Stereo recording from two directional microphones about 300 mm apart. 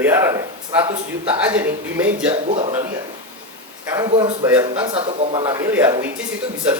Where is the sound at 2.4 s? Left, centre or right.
Right.